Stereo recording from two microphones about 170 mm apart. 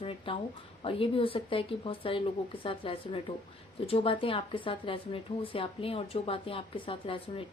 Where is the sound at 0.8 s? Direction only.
30° left (ahead or behind).